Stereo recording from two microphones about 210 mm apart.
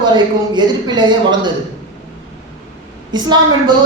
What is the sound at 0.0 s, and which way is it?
A man's voice, 20° right (ahead or behind).